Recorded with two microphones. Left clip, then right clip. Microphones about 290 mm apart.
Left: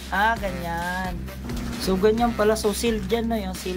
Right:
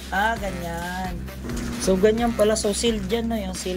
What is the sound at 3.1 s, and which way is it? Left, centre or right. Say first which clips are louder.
Music: left 1 dB; centre.